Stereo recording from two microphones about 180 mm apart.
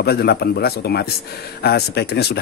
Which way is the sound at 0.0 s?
60° left (ahead or behind).